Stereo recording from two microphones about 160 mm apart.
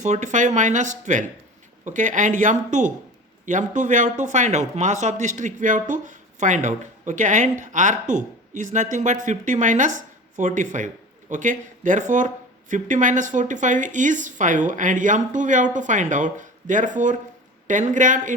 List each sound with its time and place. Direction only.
0.0 s speech: 50° right (ahead or behind)